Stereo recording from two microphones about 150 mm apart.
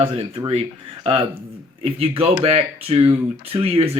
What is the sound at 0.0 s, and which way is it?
Speech, 40° right (ahead or behind).